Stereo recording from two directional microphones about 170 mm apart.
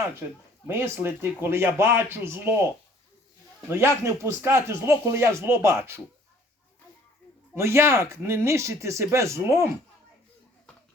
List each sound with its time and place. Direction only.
0.7 s speech: 15° right (ahead or behind)
3.7 s speech: 15° right (ahead or behind)
7.5 s speech: 15° right (ahead or behind)